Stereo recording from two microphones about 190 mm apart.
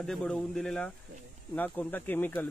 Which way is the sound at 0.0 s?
5° left (ahead or behind).